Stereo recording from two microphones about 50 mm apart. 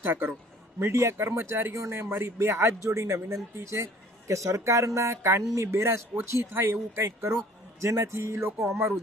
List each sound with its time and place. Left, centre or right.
0.0 s a man's voice: right
0.8 s speech: right
1.7 s speech: right
4.3 s speech: right
4.9 s speech: right